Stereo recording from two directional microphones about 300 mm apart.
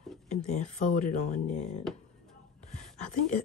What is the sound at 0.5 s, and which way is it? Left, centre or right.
Speech, left.